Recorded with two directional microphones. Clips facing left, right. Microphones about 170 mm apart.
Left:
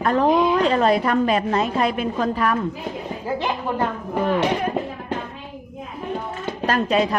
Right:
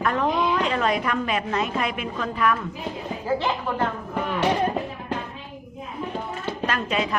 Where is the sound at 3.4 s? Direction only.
15° left (ahead or behind).